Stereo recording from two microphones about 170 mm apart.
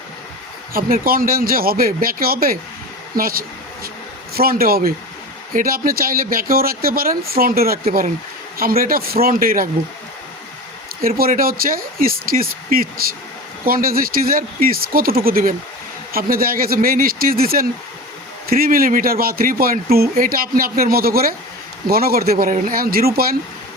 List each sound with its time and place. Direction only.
0.7 s speech: 60° right (ahead or behind)
11.0 s speech: 60° right (ahead or behind)